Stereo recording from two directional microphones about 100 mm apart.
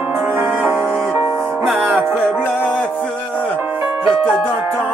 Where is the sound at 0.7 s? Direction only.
25° right (ahead or behind).